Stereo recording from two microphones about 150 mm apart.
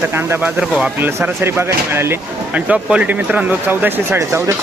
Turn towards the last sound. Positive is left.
turn(degrees=-20)  # may be behind; listen again after turning